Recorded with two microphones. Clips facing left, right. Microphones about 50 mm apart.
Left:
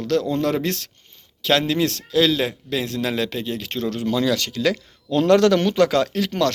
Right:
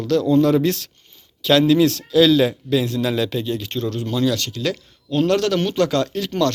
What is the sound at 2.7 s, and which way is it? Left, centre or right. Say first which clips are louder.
Speech: right 4 dB; left.